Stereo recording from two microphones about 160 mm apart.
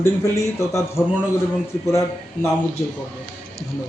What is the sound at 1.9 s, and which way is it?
Speech, 20° left (ahead or behind).